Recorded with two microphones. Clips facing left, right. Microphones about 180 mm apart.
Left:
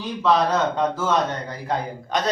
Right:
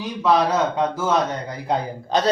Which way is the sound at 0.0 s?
10° right (ahead or behind).